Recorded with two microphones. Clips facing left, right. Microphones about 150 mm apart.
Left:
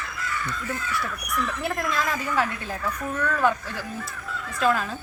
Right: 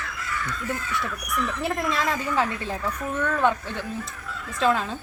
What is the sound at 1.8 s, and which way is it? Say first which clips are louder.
A woman's voice: right 1 dB; 30° right (ahead or behind).